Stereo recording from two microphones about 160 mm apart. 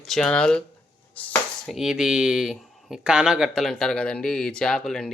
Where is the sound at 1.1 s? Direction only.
10° left (ahead or behind).